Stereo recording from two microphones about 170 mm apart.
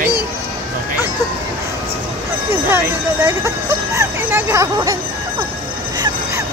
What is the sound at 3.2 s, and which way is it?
Speech, 20° right (ahead or behind).